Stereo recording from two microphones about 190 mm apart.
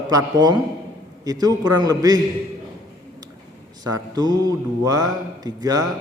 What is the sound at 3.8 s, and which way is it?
A man's voice, 20° right (ahead or behind).